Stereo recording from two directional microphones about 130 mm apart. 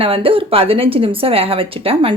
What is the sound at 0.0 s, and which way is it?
A woman's voice, 45° right (ahead or behind).